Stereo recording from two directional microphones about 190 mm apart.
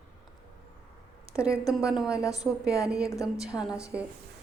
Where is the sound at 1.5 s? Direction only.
15° left (ahead or behind).